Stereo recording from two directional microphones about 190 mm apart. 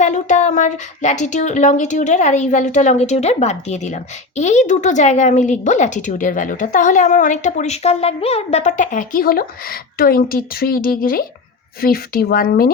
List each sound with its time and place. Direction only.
0.0 s a woman's voice: 40° left (ahead or behind)